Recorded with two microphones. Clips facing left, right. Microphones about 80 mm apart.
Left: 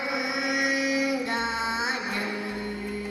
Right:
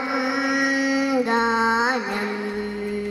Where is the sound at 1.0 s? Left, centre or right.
Right.